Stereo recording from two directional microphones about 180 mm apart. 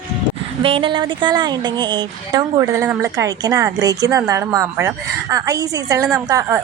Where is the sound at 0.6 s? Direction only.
30° right (ahead or behind).